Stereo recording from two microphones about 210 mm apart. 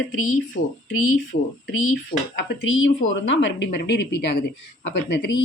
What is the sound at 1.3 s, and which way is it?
Speech, 40° left (ahead or behind).